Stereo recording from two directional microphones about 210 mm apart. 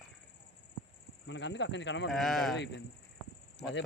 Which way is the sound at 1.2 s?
60° left (ahead or behind).